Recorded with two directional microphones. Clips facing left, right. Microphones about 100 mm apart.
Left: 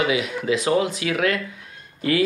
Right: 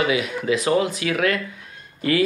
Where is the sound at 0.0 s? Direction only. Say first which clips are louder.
Right 1 dB; 20° left (ahead or behind).